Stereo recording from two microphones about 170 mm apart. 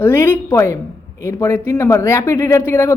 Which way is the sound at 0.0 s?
15° left (ahead or behind).